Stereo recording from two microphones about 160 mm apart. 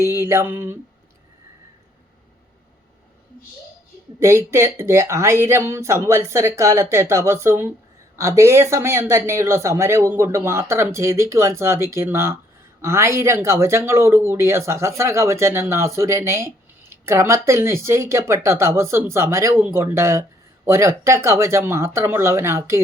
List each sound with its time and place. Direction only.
0.0 s speech: 15° right (ahead or behind)
4.2 s speech: 15° right (ahead or behind)